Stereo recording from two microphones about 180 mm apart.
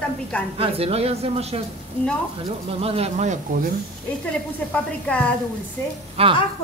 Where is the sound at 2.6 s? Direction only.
35° right (ahead or behind).